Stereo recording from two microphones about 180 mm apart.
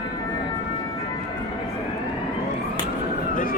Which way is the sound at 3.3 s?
50° left (ahead or behind).